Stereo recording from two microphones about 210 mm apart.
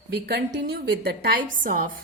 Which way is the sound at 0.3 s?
50° right (ahead or behind).